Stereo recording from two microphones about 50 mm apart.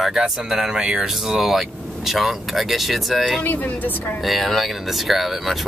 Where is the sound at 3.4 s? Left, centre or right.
Left.